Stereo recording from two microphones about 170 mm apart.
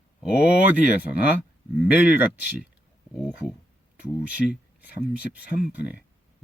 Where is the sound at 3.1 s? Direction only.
5° right (ahead or behind).